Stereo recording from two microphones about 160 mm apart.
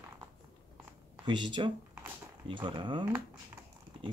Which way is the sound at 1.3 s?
30° right (ahead or behind).